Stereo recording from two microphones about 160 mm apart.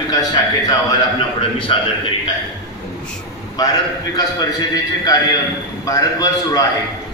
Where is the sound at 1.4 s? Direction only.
35° left (ahead or behind).